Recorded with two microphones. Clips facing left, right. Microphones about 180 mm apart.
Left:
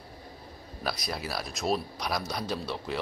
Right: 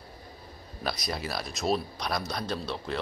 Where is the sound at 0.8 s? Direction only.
Centre (ahead or behind).